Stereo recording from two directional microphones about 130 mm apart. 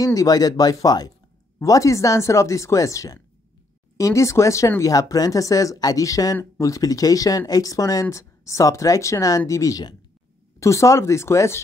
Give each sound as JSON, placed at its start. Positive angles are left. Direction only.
{"t": 0.0, "sound": "speech", "side_deg": 25}